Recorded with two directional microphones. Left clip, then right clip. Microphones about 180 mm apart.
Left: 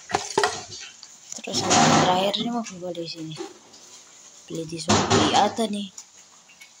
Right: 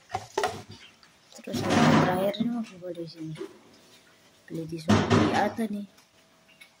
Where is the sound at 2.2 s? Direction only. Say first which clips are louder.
Left 4 dB; 15° right (ahead or behind).